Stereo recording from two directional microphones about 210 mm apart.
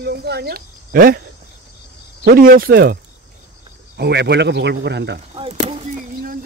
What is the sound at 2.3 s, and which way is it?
Speech, 45° right (ahead or behind).